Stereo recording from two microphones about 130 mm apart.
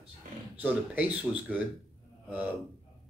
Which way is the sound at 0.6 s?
10° right (ahead or behind).